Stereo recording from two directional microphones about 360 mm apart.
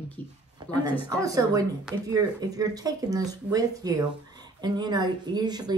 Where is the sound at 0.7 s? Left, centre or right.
Centre.